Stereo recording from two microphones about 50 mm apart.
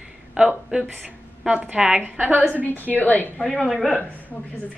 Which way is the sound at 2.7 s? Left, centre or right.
Left.